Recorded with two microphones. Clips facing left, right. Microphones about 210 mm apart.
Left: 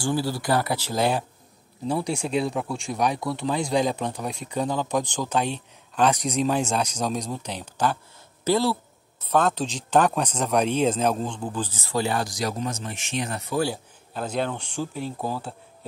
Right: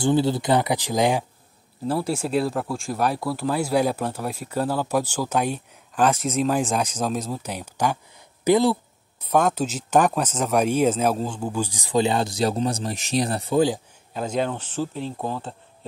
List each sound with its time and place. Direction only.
0.0 s speech: 20° right (ahead or behind)
1.9 s speech: 5° right (ahead or behind); by 13.6 s 30° right (ahead or behind)
14.3 s speech: centre (ahead or behind)
15.0 s speech: 5° left (ahead or behind)